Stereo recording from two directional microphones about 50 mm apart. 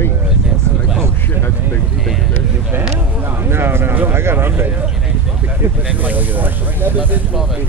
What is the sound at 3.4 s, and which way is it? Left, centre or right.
Speech, right.